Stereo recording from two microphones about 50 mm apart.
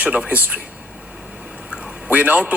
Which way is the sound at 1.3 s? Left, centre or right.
Right.